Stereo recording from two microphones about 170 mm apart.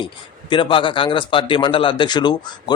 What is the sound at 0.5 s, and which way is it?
Speech, 30° left (ahead or behind).